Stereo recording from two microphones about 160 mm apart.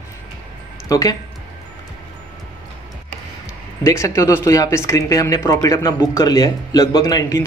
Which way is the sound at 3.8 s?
20° left (ahead or behind).